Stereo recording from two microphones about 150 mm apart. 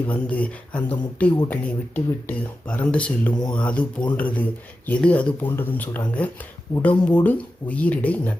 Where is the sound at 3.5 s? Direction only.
10° left (ahead or behind).